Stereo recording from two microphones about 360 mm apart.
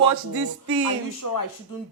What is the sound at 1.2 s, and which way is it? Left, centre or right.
Speech, left.